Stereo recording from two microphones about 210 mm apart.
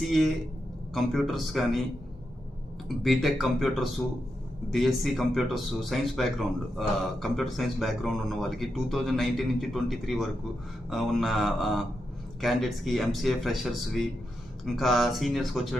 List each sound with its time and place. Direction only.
0.0 s speech: centre (ahead or behind)
3.0 s speech: centre (ahead or behind)